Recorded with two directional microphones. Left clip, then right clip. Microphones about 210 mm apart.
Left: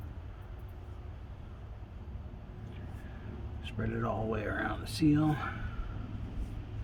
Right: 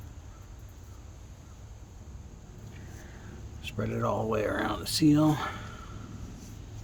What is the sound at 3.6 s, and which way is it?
Speech, 65° right (ahead or behind).